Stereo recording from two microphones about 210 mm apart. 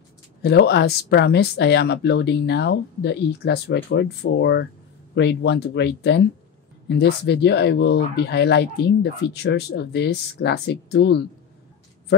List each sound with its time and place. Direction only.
0.4 s speech: 50° left (ahead or behind)